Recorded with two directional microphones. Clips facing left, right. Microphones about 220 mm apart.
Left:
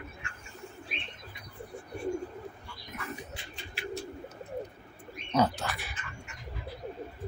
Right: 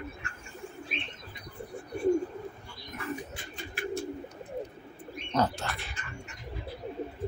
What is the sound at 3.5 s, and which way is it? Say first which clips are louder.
Bird: right 4 dB; 50° right (ahead or behind).